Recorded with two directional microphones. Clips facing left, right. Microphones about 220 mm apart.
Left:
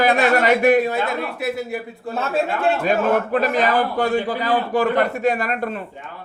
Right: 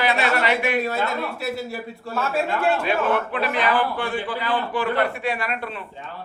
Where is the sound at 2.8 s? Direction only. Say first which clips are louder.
Left 4 dB; 45° left (ahead or behind).